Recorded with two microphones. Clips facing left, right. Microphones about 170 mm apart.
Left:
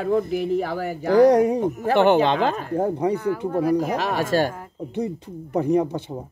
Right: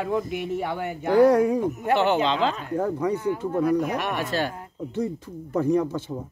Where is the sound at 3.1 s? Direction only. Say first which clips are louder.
Left 2 dB; 60° left (ahead or behind).